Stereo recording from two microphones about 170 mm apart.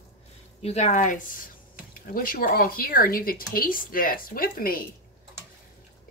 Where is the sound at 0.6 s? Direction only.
40° left (ahead or behind); by 4.8 s 60° left (ahead or behind).